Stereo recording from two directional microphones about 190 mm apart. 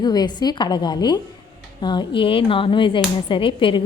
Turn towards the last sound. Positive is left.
turn(degrees=25)  # may be behind; listen again after turning